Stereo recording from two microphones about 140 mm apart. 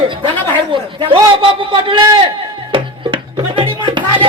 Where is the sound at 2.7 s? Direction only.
35° right (ahead or behind).